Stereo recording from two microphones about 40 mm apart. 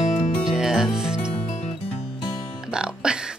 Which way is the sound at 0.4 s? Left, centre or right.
Centre.